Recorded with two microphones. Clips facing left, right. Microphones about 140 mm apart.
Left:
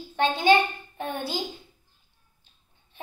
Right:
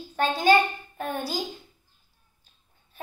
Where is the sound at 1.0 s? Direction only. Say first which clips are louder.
Even; 40° right (ahead or behind).